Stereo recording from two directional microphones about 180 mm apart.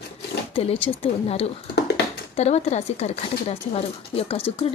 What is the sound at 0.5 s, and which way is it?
Speech, 35° left (ahead or behind).